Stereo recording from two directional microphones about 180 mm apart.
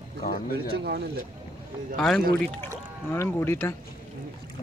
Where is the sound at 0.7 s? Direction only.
65° right (ahead or behind).